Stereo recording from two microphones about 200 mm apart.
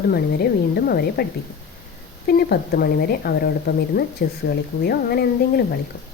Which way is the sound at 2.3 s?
50° left (ahead or behind).